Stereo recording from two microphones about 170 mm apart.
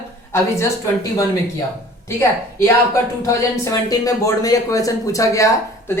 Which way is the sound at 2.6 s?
15° left (ahead or behind).